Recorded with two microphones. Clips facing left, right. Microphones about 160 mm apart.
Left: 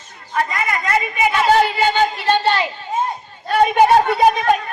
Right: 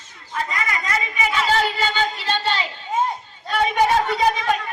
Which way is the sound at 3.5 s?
50° left (ahead or behind).